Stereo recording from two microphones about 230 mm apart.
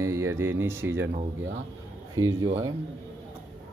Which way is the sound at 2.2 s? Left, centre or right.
Centre.